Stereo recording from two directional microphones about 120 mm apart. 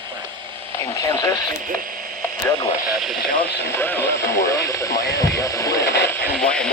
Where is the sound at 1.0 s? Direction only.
30° left (ahead or behind).